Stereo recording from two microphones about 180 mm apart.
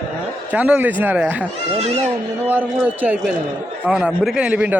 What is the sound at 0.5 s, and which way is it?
Speech, 10° right (ahead or behind).